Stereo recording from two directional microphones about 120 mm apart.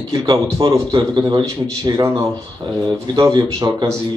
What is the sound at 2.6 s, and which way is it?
Speech, 40° right (ahead or behind).